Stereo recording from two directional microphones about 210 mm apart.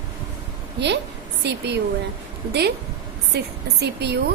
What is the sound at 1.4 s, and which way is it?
Speech, 50° right (ahead or behind).